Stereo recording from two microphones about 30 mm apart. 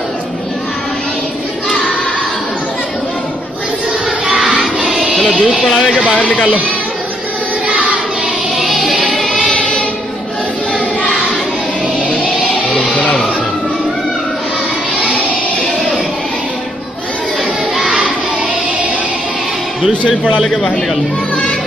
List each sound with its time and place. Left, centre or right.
4.3 s music: centre
5.3 s speech: right
6.1 s speech: left
7.6 s choir: right
8.5 s music: centre
9.0 s choir: centre
9.6 s choir: left
12.7 s music: left
17.7 s child singing: centre